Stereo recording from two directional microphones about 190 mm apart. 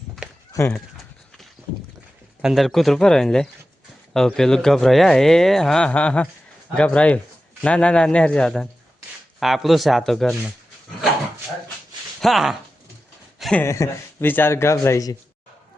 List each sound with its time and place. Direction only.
0.5 s speech: 15° left (ahead or behind)
2.4 s speech: centre (ahead or behind)
12.2 s speech: centre (ahead or behind); by 15.1 s 15° left (ahead or behind)